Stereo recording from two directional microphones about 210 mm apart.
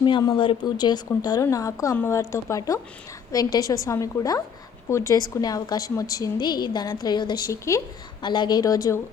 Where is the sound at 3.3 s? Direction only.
15° left (ahead or behind).